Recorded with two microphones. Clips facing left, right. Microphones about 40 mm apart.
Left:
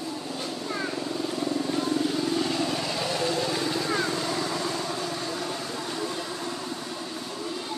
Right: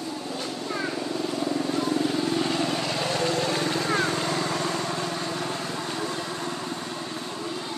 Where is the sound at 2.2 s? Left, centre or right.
Right.